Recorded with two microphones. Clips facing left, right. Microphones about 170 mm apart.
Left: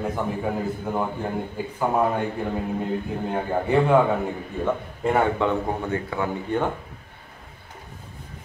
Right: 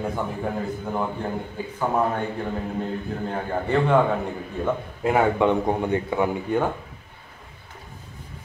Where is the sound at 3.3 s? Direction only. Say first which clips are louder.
Left 2 dB; 10° left (ahead or behind).